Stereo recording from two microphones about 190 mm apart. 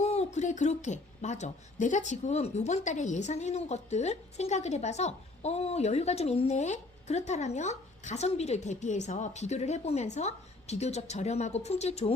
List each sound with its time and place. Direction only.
0.0 s a woman's voice: 35° left (ahead or behind)